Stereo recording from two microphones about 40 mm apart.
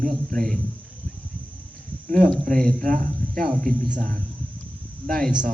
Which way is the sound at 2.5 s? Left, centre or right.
Centre.